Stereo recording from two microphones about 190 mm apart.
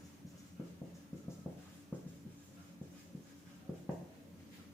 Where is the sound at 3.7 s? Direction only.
15° left (ahead or behind).